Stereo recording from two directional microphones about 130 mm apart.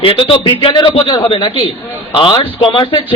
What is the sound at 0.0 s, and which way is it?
A man's voice, 40° left (ahead or behind).